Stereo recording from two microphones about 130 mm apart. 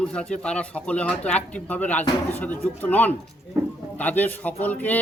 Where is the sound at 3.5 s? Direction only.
20° right (ahead or behind).